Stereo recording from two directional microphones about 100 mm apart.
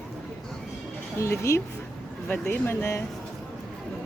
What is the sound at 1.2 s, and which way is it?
A woman's voice, 30° left (ahead or behind).